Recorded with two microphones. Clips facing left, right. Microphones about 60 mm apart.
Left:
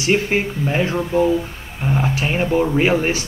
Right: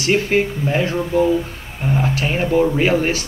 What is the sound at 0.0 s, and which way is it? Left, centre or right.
Speech, centre.